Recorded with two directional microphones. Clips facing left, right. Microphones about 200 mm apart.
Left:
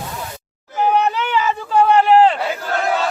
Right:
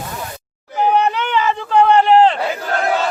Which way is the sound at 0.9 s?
10° left (ahead or behind).